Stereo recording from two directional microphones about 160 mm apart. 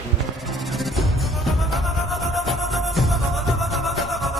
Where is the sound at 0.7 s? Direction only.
Centre (ahead or behind).